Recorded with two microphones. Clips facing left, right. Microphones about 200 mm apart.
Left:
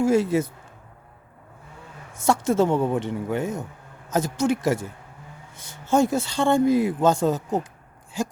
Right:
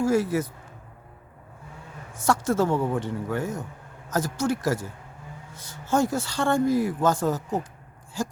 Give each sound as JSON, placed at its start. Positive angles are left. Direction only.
{"t": 0.0, "sound": "speech", "side_deg": 25}
{"t": 2.1, "sound": "speech", "side_deg": 25}
{"t": 5.9, "sound": "speech", "side_deg": 25}